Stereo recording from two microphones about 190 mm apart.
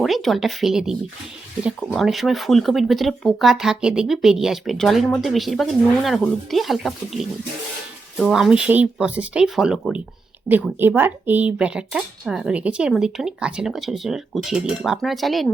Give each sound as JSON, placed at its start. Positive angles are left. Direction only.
{"t": 0.0, "sound": "speech", "side_deg": 0}